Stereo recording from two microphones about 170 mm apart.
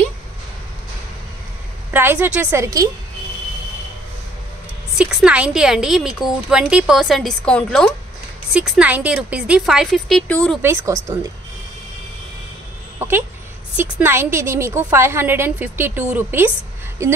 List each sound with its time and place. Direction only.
1.9 s a woman's voice: 10° right (ahead or behind)
4.9 s a woman's voice: 5° right (ahead or behind)
8.5 s a woman's voice: 5° right (ahead or behind); by 10.6 s 10° left (ahead or behind)
10.6 s a woman's voice: 15° right (ahead or behind)
13.7 s a woman's voice: 10° right (ahead or behind)